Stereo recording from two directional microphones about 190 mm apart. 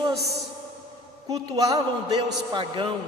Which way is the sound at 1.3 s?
20° right (ahead or behind).